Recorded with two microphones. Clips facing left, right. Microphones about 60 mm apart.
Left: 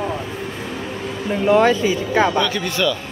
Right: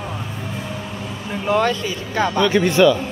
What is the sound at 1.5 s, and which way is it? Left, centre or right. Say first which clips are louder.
Speech: left 4 dB; centre.